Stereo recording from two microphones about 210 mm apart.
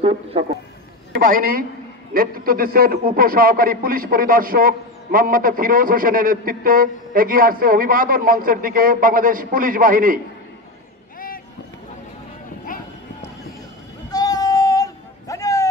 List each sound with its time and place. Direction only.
0.0 s speech: 30° right (ahead or behind)
1.1 s a man's voice: 40° right (ahead or behind)
11.1 s a sound: 40° left (ahead or behind)
14.1 s child singing: 15° left (ahead or behind)